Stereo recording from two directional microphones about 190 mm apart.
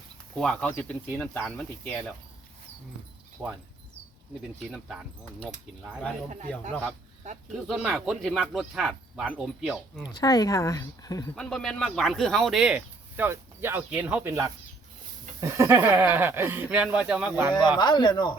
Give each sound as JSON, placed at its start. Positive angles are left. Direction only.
{"t": 0.3, "sound": "speech", "side_deg": 5}
{"t": 3.4, "sound": "speech", "side_deg": -10}
{"t": 5.8, "sound": "speech", "side_deg": 0}
{"t": 7.7, "sound": "speech", "side_deg": -5}
{"t": 10.2, "sound": "speech", "side_deg": 20}
{"t": 11.3, "sound": "speech", "side_deg": 0}
{"t": 17.5, "sound": "speech", "side_deg": 20}